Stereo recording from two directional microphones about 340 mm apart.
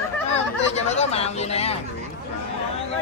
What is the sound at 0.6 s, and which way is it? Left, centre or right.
Chatter, centre.